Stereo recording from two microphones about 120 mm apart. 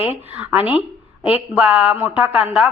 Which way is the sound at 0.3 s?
15° right (ahead or behind).